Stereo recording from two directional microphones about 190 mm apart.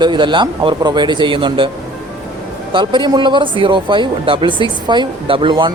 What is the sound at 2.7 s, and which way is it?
Speech, 25° right (ahead or behind).